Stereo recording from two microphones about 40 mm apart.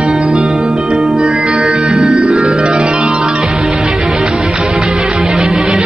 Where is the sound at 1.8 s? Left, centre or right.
Right.